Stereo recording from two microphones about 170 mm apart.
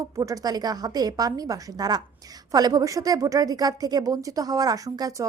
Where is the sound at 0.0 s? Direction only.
20° right (ahead or behind).